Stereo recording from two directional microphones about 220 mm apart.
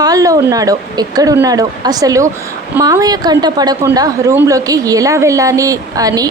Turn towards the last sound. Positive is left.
turn(degrees=-15)  # may be behind; listen again after turning